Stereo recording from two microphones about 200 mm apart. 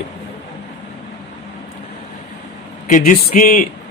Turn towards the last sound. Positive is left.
turn(degrees=40)  # may be behind; listen again after turning